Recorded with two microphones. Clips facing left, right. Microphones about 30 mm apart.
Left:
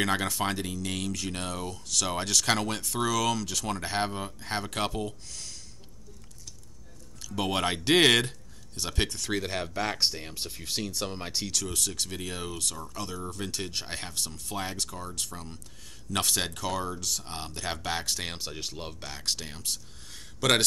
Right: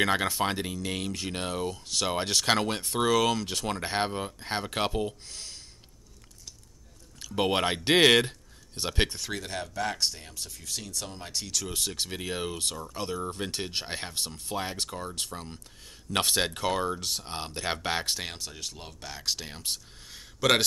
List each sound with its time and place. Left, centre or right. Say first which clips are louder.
0.0 s speech: right 2 dB; centre
7.2 s speech: right 3 dB; centre
7.6 s speech: even; centre
8.7 s speech: right 2 dB; centre
9.3 s speech: left 4 dB; centre
10.3 s speech: left 4 dB; left
11.6 s speech: even; centre
18.4 s speech: left 3 dB; centre
19.0 s speech: right 2 dB; centre
20.1 s a sound: right 1 dB; centre